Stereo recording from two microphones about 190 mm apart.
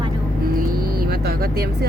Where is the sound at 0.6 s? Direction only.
50° right (ahead or behind).